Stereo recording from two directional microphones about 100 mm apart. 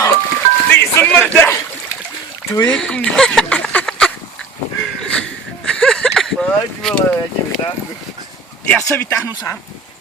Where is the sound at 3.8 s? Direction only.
5° left (ahead or behind).